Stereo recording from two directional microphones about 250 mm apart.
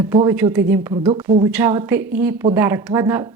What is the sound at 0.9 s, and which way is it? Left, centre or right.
Speech, right.